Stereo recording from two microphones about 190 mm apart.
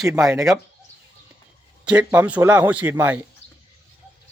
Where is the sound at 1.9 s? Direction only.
5° right (ahead or behind).